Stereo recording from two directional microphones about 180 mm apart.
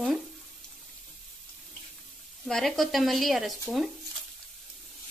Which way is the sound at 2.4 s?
Centre (ahead or behind).